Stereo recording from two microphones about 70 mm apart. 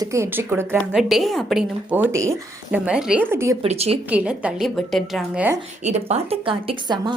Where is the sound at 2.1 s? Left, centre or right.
Right.